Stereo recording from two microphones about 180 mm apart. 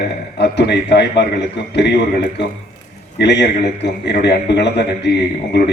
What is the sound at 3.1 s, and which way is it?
A man's voice, 70° left (ahead or behind).